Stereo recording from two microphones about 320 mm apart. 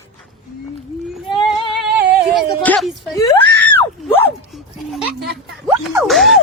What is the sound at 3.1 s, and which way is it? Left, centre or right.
Screaming, centre.